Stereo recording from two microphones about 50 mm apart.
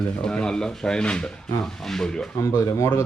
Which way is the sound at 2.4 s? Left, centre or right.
Left.